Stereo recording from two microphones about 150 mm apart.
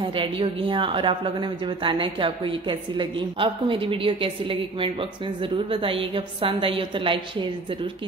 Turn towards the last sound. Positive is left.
turn(degrees=-35)  # may be behind; listen again after turning